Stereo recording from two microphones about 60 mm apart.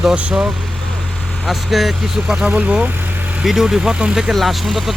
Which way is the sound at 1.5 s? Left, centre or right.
Centre.